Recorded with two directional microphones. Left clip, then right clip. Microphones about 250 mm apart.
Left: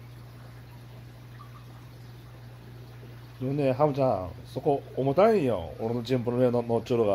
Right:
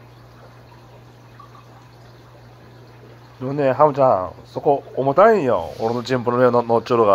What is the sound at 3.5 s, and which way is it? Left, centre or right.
Speech, centre.